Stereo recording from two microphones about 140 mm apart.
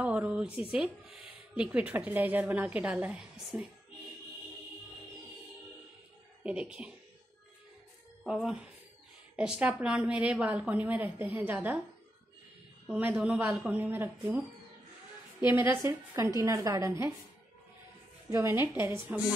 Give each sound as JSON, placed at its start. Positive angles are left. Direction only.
{"t": 0.0, "sound": "a sound", "side_deg": -10}
{"t": 0.6, "sound": "speech", "side_deg": -5}
{"t": 6.4, "sound": "speech", "side_deg": -10}
{"t": 8.3, "sound": "speech", "side_deg": -5}
{"t": 12.8, "sound": "speech", "side_deg": -5}
{"t": 15.4, "sound": "speech", "side_deg": -15}
{"t": 18.3, "sound": "speech", "side_deg": -20}